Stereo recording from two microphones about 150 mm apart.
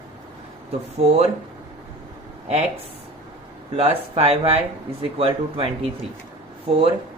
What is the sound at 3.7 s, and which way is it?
Speech, 40° right (ahead or behind).